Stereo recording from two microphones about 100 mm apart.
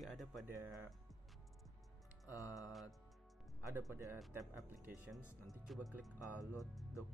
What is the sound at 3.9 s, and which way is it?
Speech, 25° right (ahead or behind).